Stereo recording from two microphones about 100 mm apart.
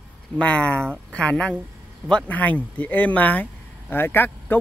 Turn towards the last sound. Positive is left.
turn(degrees=20)  # may be behind; listen again after turning